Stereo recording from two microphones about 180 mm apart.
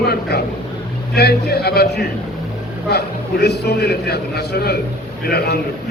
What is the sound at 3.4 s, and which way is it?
A man's voice, 60° left (ahead or behind).